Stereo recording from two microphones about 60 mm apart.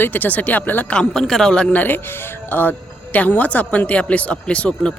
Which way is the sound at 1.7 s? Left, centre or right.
Left.